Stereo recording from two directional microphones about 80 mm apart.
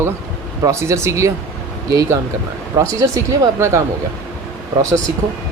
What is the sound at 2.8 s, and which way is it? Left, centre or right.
Speech, right.